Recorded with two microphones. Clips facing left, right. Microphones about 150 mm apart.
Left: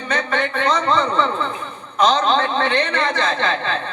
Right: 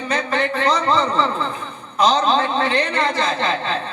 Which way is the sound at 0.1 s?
35° right (ahead or behind).